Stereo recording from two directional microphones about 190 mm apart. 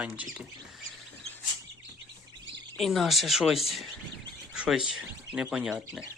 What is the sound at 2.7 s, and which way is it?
Speech, centre (ahead or behind).